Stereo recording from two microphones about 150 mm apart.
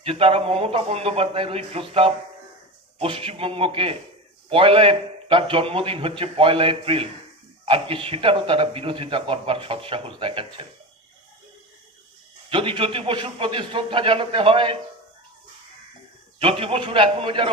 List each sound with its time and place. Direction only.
0.0 s a man's voice: 40° right (ahead or behind)
12.5 s a man's voice: 35° right (ahead or behind)
16.4 s a man's voice: 40° right (ahead or behind)